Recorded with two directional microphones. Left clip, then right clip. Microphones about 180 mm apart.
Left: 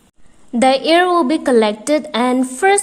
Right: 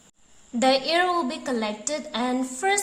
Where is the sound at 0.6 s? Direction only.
40° left (ahead or behind).